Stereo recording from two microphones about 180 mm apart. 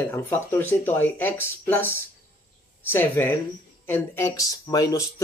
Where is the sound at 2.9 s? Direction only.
10° left (ahead or behind).